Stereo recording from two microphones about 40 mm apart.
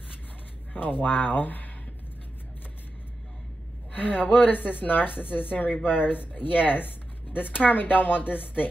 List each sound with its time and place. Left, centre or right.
1.0 s speech: left
3.9 s speech: left